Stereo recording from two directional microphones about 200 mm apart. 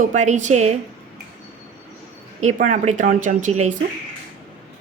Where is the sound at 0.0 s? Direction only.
35° right (ahead or behind).